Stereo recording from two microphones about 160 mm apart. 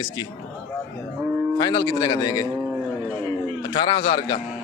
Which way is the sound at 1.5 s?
25° left (ahead or behind).